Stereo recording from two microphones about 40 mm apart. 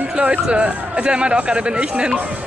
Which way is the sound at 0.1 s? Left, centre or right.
Right.